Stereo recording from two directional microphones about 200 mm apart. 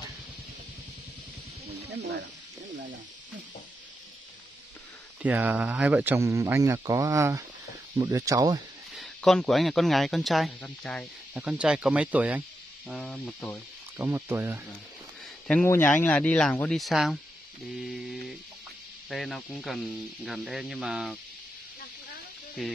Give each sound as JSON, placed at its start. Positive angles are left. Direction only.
{"t": 1.9, "sound": "speech", "side_deg": -55}
{"t": 5.2, "sound": "a man's voice", "side_deg": -10}
{"t": 8.9, "sound": "speech", "side_deg": 0}
{"t": 13.9, "sound": "a man's voice", "side_deg": -10}
{"t": 15.4, "sound": "speech", "side_deg": 10}
{"t": 17.7, "sound": "a sound", "side_deg": 0}
{"t": 19.0, "sound": "speech", "side_deg": 0}